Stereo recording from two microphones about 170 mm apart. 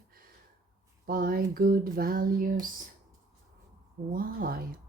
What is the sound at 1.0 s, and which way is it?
Speech, 60° right (ahead or behind).